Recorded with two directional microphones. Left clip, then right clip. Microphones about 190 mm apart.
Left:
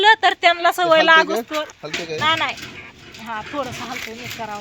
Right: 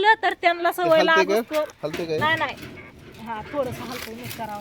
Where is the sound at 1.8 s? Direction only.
45° right (ahead or behind).